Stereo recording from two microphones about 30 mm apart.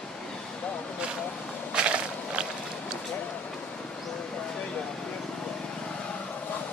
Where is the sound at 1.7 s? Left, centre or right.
Right.